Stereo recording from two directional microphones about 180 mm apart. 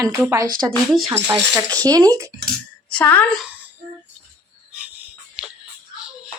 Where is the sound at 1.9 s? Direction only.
20° right (ahead or behind).